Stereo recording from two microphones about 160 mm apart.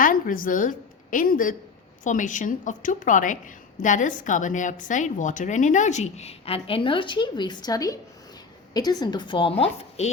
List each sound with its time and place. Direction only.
0.0 s a woman's voice: 55° left (ahead or behind); by 10.1 s 40° left (ahead or behind)